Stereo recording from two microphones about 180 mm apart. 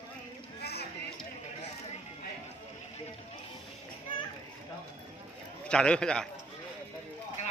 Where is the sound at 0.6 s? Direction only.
65° left (ahead or behind).